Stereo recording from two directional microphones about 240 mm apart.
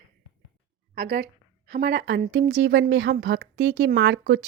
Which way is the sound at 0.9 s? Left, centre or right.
Right.